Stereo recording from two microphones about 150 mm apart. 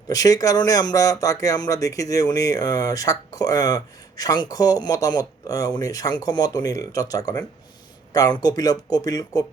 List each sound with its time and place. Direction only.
0.1 s speech: 25° left (ahead or behind)